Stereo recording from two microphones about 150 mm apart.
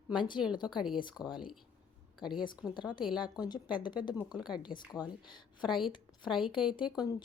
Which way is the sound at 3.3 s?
30° left (ahead or behind).